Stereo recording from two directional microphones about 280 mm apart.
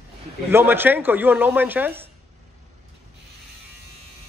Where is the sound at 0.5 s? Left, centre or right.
Centre.